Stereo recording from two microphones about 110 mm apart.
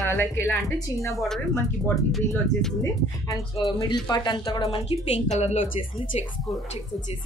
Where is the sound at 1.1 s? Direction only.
5° left (ahead or behind).